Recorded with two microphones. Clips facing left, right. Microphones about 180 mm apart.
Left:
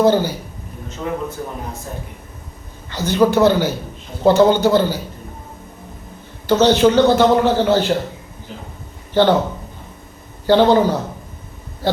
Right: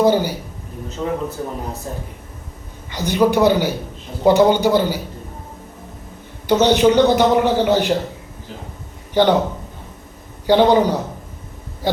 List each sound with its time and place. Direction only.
0.0 s a man's voice: 10° right (ahead or behind)
2.9 s a man's voice: 15° right (ahead or behind)
6.5 s a man's voice: 15° right (ahead or behind)
9.2 s a man's voice: 15° right (ahead or behind)
10.4 s a man's voice: 15° right (ahead or behind)